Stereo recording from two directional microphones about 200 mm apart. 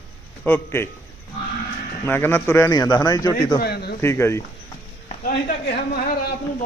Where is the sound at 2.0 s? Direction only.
10° left (ahead or behind).